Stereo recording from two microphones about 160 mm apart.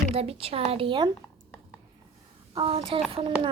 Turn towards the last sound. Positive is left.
turn(degrees=-35)  # may be behind; listen again after turning